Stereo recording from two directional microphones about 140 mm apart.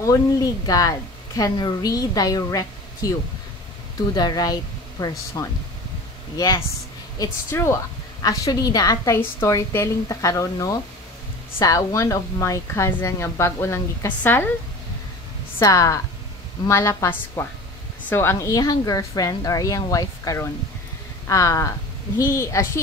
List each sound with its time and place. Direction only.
0.0 s a woman's voice: 25° left (ahead or behind)
15.6 s a woman's voice: 25° left (ahead or behind)